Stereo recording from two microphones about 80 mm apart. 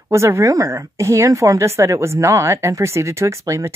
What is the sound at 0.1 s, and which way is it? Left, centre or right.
Speech, right.